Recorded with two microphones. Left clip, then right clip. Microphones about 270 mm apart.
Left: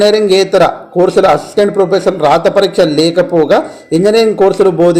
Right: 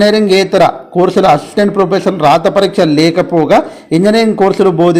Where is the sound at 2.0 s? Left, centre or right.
Right.